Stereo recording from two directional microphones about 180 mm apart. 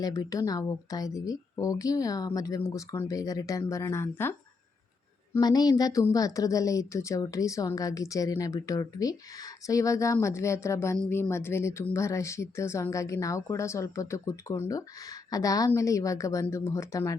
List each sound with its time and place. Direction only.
0.0 s speech: 20° left (ahead or behind)